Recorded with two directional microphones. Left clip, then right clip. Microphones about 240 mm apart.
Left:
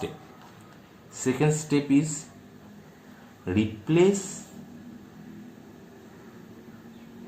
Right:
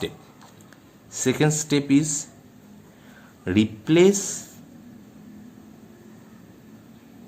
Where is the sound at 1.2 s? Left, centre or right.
Right.